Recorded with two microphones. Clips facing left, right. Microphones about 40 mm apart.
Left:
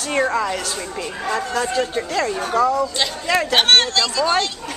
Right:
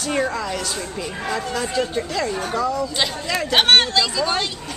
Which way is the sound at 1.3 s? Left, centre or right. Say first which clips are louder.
Left 3 dB; centre.